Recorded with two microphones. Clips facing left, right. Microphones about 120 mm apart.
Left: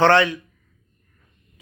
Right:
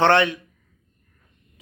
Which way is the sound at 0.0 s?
25° right (ahead or behind).